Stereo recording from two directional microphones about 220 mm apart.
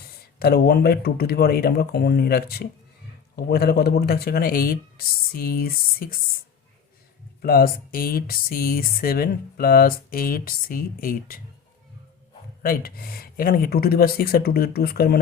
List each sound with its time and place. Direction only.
0.0 s speech: 45° left (ahead or behind)
7.4 s speech: 40° left (ahead or behind)
12.6 s speech: 40° left (ahead or behind)